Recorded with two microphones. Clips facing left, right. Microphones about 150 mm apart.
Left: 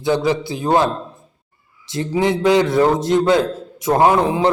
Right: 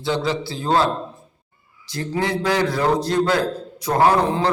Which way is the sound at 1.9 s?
20° left (ahead or behind).